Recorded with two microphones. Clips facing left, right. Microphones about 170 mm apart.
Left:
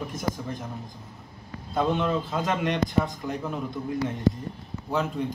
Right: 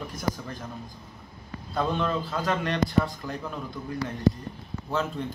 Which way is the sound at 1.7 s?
20° left (ahead or behind).